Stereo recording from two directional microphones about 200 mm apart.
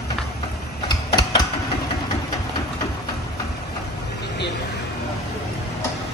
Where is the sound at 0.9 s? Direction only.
20° left (ahead or behind).